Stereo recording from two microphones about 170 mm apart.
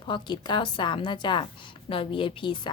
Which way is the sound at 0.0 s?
25° left (ahead or behind).